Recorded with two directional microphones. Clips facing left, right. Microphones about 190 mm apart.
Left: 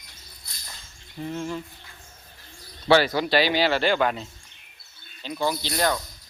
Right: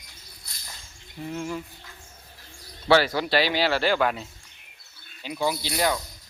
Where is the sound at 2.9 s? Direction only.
20° left (ahead or behind).